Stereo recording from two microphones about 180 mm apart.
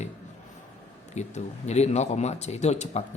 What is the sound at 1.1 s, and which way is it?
A man's voice, 40° left (ahead or behind).